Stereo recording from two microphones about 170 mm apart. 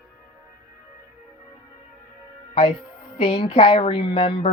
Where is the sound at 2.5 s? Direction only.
30° left (ahead or behind).